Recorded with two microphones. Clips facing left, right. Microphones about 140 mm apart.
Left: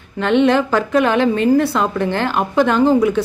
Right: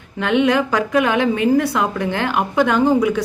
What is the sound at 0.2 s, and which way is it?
A woman's voice, 10° right (ahead or behind).